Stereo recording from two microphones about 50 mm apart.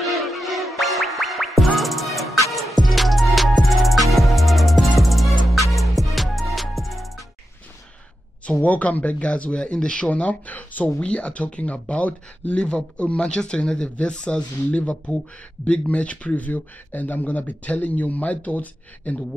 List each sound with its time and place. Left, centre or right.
0.0 s music: centre
8.5 s speech: left
10.0 s speech: left